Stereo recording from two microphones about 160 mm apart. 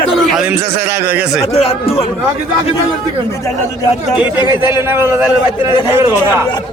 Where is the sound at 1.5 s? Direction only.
40° left (ahead or behind).